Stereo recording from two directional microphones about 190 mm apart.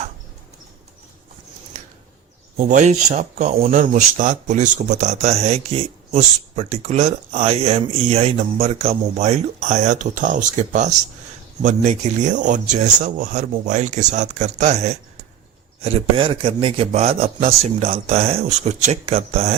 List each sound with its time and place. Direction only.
2.6 s speech: 40° right (ahead or behind)